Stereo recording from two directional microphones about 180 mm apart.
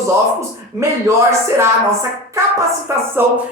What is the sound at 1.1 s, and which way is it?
Music, 15° right (ahead or behind).